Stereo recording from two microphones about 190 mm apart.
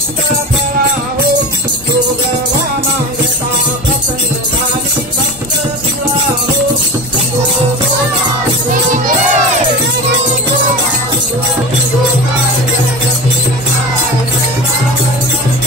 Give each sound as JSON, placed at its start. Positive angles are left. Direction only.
{"t": 8.9, "sound": "crowd", "side_deg": -40}